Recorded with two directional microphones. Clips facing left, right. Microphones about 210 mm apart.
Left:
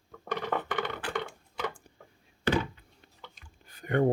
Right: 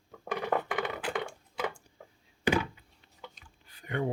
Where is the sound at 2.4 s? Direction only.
10° right (ahead or behind).